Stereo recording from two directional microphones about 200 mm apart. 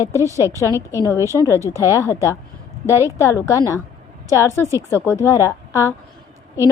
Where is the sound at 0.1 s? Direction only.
15° right (ahead or behind).